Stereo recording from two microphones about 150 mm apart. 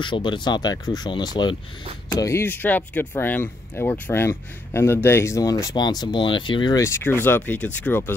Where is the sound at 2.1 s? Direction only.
20° left (ahead or behind).